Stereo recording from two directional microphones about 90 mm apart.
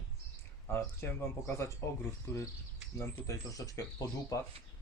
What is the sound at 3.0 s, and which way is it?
Speech, 35° left (ahead or behind).